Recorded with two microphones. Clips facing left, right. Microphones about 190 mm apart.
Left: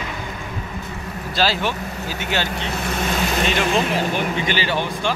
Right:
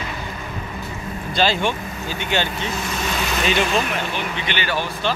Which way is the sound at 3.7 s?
25° left (ahead or behind).